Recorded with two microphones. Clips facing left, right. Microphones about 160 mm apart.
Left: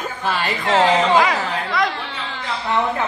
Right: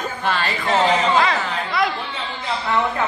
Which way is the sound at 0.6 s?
90° left.